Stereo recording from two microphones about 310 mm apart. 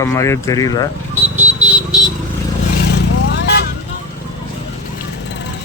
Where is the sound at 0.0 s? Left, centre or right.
Centre.